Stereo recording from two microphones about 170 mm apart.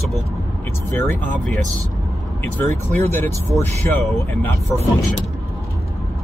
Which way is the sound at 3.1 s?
15° left (ahead or behind).